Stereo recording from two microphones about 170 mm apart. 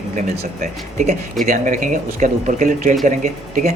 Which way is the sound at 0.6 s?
45° right (ahead or behind).